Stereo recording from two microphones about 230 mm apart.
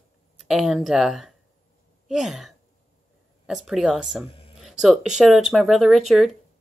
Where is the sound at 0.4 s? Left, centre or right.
Centre.